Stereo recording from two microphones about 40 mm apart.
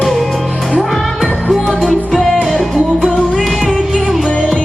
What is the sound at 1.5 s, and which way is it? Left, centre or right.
Music, centre.